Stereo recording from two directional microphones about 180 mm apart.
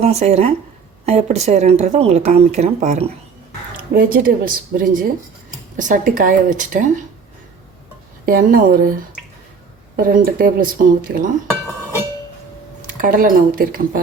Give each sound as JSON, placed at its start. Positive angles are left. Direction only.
{"t": 0.0, "sound": "speech", "side_deg": -35}
{"t": 3.9, "sound": "a woman's voice", "side_deg": -50}
{"t": 8.3, "sound": "a woman's voice", "side_deg": -50}
{"t": 10.0, "sound": "a woman's voice", "side_deg": -55}
{"t": 13.0, "sound": "a woman's voice", "side_deg": -50}